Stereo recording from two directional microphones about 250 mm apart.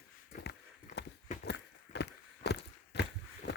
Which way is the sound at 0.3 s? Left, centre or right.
Left.